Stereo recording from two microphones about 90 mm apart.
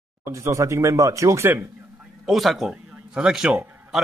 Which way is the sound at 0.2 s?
35° right (ahead or behind).